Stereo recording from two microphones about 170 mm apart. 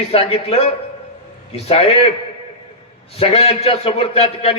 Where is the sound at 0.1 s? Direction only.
35° left (ahead or behind).